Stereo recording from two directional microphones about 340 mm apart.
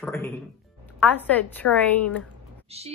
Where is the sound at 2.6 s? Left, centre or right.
Centre.